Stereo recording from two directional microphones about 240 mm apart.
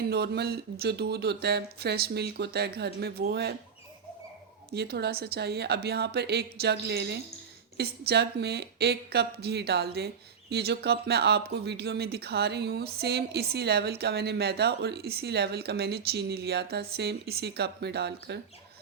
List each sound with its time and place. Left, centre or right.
0.1 s speech: right
4.7 s speech: right